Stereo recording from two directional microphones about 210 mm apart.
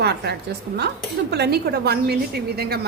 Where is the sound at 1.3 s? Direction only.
50° right (ahead or behind).